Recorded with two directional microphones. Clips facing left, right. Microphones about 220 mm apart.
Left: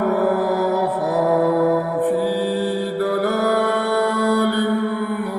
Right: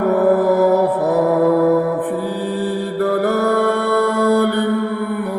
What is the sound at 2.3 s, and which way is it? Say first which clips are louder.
Music: even; 50° right (ahead or behind).